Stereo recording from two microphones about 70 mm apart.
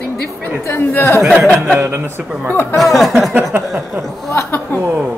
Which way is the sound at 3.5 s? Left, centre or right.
Right.